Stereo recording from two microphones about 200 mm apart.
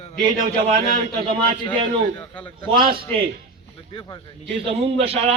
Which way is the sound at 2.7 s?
45° right (ahead or behind).